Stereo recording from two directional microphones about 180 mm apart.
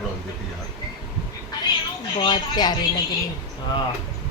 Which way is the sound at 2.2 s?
25° left (ahead or behind).